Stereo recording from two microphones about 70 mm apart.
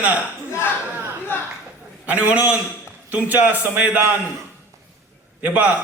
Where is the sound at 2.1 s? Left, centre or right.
Right.